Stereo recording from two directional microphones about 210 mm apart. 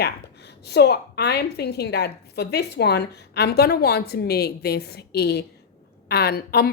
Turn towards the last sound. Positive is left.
turn(degrees=50)  # may be behind; listen again after turning